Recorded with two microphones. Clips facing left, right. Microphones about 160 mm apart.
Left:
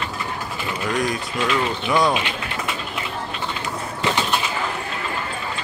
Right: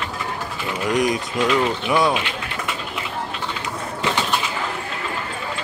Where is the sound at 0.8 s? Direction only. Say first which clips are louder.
Right 4 dB; 15° right (ahead or behind).